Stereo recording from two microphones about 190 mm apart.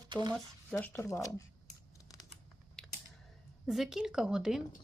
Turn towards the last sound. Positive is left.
turn(degrees=-5)  # may be behind; listen again after turning